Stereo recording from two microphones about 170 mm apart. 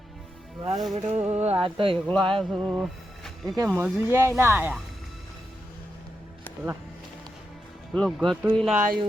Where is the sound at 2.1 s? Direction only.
30° right (ahead or behind).